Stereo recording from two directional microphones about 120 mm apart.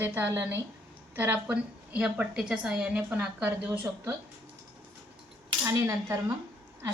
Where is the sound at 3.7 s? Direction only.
25° right (ahead or behind).